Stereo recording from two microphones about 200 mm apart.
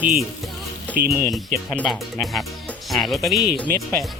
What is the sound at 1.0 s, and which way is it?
Speech, 50° right (ahead or behind).